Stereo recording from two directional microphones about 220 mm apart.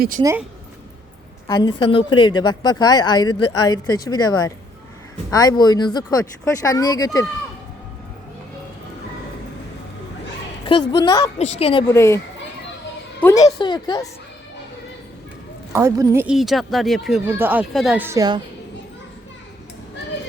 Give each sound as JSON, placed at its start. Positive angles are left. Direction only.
{"t": 0.2, "sound": "speech", "side_deg": -15}
{"t": 1.5, "sound": "a woman's voice", "side_deg": 20}
{"t": 10.7, "sound": "a woman's voice", "side_deg": 20}
{"t": 13.2, "sound": "a woman's voice", "side_deg": 15}
{"t": 15.7, "sound": "speech", "side_deg": -10}